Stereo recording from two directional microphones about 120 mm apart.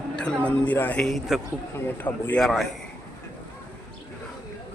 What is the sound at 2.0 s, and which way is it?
Speech, 15° left (ahead or behind).